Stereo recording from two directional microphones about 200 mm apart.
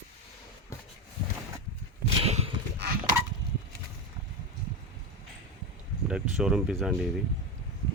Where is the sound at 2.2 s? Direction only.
30° right (ahead or behind).